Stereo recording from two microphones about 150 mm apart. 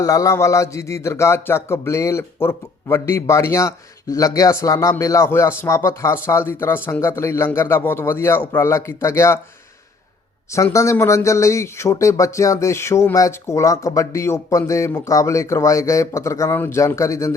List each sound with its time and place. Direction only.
0.0 s a man's voice: 20° left (ahead or behind)
10.5 s speech: 20° left (ahead or behind)